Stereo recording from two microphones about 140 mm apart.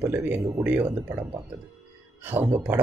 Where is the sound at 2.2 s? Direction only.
15° right (ahead or behind).